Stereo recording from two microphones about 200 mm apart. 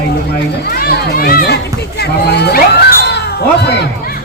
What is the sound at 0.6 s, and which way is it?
Speech, 50° left (ahead or behind).